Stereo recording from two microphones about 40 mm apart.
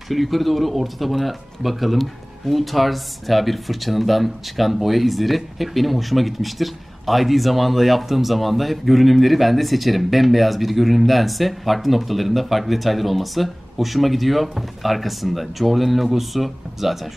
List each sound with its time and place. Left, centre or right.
0.1 s speech: centre